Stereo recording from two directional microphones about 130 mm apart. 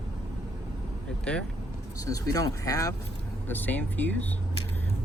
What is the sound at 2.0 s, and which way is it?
Speech, 25° left (ahead or behind).